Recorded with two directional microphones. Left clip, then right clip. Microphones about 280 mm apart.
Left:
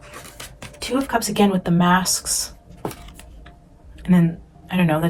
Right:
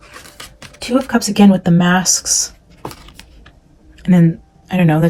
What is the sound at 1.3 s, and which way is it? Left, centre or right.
Speech, right.